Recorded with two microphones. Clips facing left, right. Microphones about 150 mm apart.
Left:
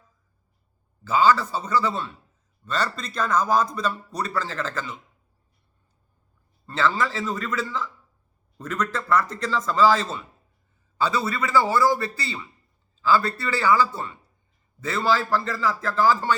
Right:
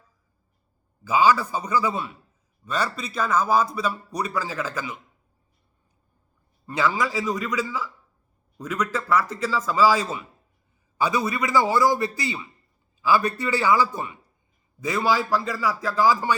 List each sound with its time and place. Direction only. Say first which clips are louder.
1.0 s a man's voice: even; 10° right (ahead or behind)
6.7 s a man's voice: even; 15° right (ahead or behind)